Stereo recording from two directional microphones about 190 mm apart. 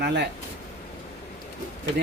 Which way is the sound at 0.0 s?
60° right (ahead or behind).